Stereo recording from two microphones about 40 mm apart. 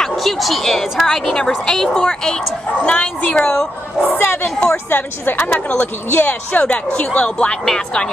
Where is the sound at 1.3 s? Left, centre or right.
Centre.